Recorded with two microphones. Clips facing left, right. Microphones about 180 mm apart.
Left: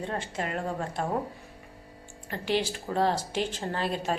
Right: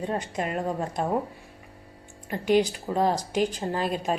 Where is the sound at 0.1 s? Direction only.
20° right (ahead or behind).